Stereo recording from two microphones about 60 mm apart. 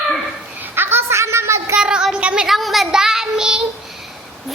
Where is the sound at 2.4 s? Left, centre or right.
Centre.